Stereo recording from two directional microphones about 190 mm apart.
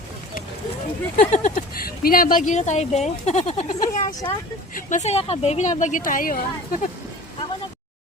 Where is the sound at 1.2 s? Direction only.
40° left (ahead or behind).